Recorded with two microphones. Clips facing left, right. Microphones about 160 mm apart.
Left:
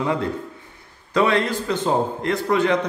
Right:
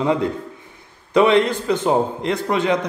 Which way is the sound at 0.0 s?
20° right (ahead or behind).